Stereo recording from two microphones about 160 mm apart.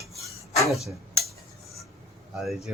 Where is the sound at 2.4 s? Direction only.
Centre (ahead or behind).